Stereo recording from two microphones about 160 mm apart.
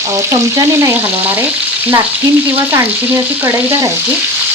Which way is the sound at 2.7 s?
15° right (ahead or behind).